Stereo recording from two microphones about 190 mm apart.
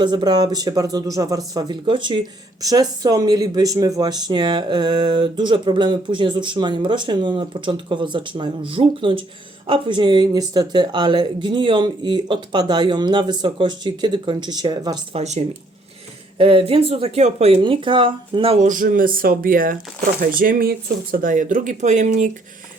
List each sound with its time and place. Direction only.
0.0 s speech: 25° right (ahead or behind)
15.2 s speech: 35° right (ahead or behind)